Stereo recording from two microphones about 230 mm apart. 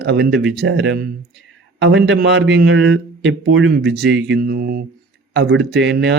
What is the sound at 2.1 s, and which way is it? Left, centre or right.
Speech, right.